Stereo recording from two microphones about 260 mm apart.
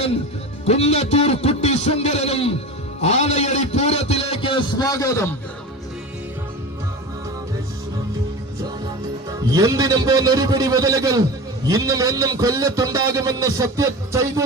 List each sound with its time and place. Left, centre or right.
0.6 s a man's voice: left
9.5 s a man's voice: centre